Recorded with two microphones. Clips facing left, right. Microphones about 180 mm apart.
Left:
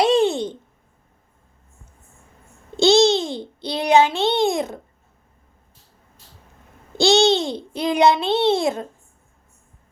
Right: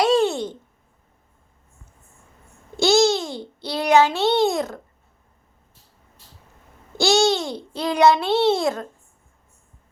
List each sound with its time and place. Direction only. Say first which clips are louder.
0.0 s a sound: left 1 dB; 15° left (ahead or behind)
2.8 s a child's voice: left 2 dB; 20° left (ahead or behind)
7.2 s a child's voice: left 2 dB; 25° left (ahead or behind)